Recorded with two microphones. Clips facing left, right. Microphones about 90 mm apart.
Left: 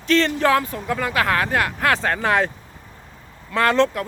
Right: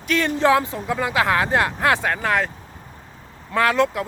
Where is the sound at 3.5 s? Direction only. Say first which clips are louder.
Left 1 dB; 5° right (ahead or behind).